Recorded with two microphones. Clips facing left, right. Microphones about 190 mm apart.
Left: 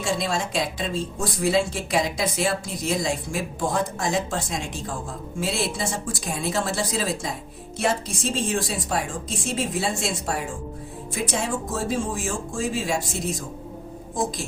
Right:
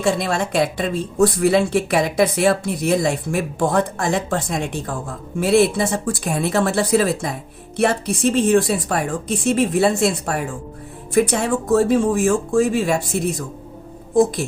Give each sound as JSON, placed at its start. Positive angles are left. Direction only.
{"t": 0.0, "sound": "a woman's voice", "side_deg": -60}